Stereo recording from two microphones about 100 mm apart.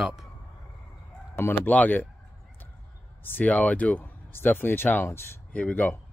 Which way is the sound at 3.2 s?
20° left (ahead or behind).